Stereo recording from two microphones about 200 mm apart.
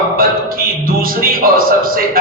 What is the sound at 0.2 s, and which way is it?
A man's voice, 45° right (ahead or behind).